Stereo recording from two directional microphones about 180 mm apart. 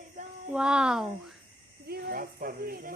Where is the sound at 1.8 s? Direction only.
60° right (ahead or behind).